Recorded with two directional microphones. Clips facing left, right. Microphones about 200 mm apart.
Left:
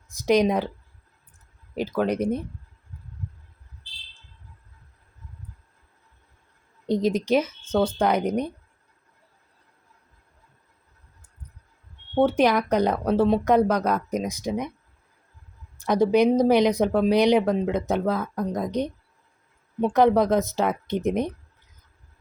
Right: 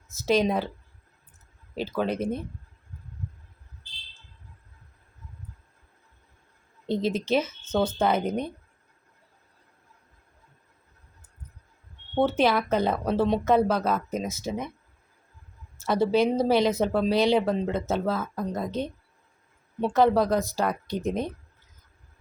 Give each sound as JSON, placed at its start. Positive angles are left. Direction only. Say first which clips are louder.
{"t": 0.1, "sound": "speech", "louder": "left 3 dB", "side_deg": 15}
{"t": 1.7, "sound": "speech", "louder": "left 3 dB", "side_deg": 15}
{"t": 6.8, "sound": "speech", "louder": "left 4 dB", "side_deg": 15}
{"t": 12.1, "sound": "speech", "louder": "left 3 dB", "side_deg": 10}
{"t": 15.8, "sound": "a woman's voice", "louder": "left 3 dB", "side_deg": 15}